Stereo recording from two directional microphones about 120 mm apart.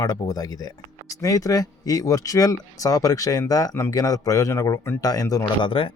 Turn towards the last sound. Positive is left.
turn(degrees=45)  # may be behind; listen again after turning